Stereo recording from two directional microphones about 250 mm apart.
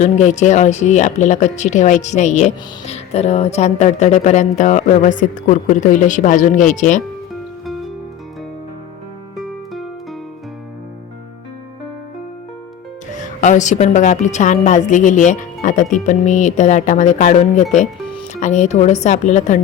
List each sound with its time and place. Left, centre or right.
0.0 s speech: left
9.4 s music: centre
13.1 s speech: left